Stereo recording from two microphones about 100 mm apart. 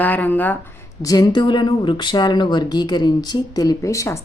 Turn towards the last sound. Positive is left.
turn(degrees=30)  # may be behind; listen again after turning